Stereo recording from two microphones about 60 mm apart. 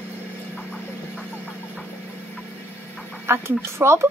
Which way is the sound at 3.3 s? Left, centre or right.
Right.